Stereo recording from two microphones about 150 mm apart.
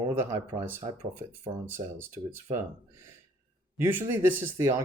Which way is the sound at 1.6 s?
15° right (ahead or behind).